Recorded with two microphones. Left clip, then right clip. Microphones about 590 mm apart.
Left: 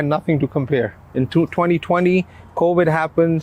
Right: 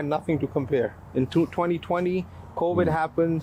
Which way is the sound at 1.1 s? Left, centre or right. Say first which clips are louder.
Left 6 dB; left.